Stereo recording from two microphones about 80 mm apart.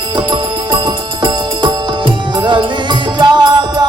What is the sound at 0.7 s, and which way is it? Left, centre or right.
Music, right.